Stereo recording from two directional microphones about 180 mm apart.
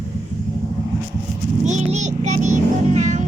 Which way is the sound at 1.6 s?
40° right (ahead or behind).